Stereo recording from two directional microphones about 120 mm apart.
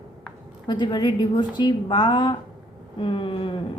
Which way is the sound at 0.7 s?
40° left (ahead or behind).